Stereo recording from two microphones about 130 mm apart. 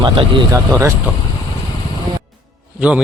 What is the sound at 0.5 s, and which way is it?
Speech, 25° right (ahead or behind).